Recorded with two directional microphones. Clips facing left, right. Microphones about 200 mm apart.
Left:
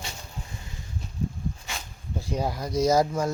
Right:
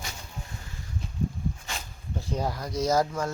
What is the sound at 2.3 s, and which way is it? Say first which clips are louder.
Speech: left 3 dB; 10° left (ahead or behind).